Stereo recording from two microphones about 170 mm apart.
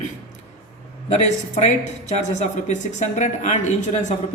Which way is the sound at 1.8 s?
45° left (ahead or behind).